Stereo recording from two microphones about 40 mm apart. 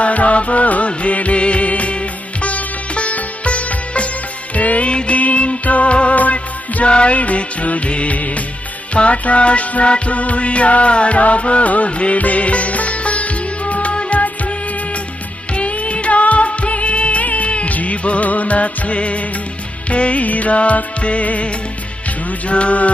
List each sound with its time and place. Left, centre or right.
0.0 s music: left
15.5 s music: left